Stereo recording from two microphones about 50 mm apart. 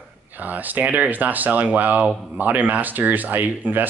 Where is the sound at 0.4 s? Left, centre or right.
Right.